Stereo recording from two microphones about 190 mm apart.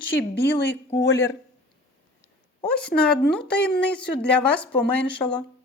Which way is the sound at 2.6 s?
5° left (ahead or behind).